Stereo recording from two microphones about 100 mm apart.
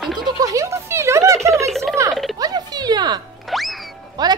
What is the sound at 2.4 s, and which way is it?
Music, 40° right (ahead or behind).